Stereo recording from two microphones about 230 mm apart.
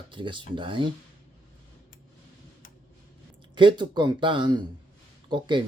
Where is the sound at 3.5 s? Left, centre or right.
Right.